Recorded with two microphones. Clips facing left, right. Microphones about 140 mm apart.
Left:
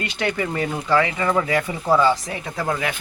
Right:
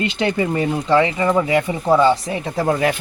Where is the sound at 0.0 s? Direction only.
25° right (ahead or behind).